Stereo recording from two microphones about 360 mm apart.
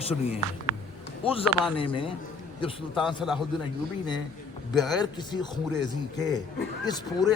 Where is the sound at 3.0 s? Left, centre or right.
Centre.